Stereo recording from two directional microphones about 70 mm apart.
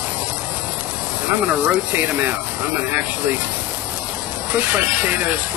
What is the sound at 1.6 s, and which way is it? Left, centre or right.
Speech, right.